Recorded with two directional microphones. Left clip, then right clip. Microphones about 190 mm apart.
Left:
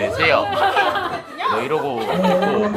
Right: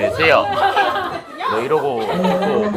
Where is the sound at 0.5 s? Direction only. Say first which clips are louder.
Right 1 dB; 55° left (ahead or behind).